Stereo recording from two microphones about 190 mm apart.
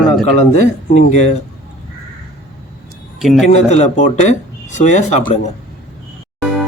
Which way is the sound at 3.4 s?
35° left (ahead or behind).